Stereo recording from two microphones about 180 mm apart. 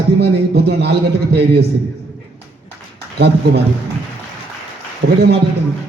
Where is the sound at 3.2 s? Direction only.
70° right (ahead or behind).